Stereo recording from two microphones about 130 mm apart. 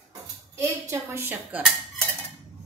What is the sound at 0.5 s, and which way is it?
A woman's voice, 20° right (ahead or behind).